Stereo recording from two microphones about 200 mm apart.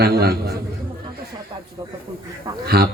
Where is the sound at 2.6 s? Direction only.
50° right (ahead or behind).